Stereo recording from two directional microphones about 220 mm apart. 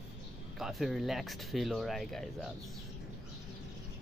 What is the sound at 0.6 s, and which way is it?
Speech, centre (ahead or behind).